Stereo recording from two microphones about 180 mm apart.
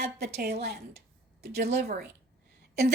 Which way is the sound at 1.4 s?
60° right (ahead or behind).